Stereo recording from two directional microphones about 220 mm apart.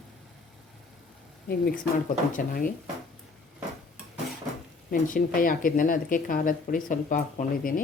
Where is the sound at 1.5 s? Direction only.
40° left (ahead or behind).